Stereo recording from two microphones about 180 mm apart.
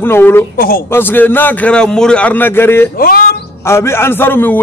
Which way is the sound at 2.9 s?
55° left (ahead or behind).